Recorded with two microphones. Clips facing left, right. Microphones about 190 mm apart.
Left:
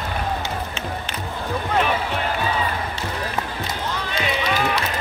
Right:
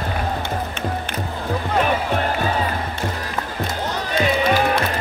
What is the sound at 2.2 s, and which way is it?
Music, 45° right (ahead or behind).